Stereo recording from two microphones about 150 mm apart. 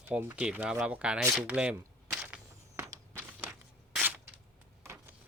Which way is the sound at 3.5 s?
5° right (ahead or behind).